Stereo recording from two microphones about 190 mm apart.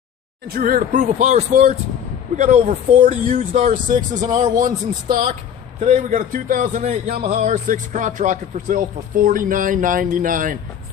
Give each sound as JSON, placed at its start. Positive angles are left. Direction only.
{"t": 0.5, "sound": "speech", "side_deg": -50}